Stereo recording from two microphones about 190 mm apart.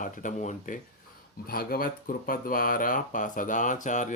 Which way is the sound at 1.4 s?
50° left (ahead or behind).